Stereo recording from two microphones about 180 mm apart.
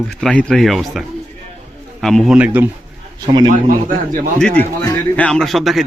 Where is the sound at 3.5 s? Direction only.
50° right (ahead or behind).